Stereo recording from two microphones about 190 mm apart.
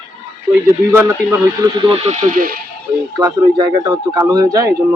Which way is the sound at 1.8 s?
35° right (ahead or behind).